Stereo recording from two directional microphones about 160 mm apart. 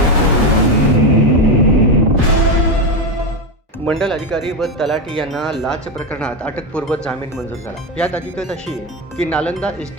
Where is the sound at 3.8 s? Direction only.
5° left (ahead or behind).